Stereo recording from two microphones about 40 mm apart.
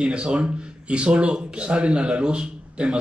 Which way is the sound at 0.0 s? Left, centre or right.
Right.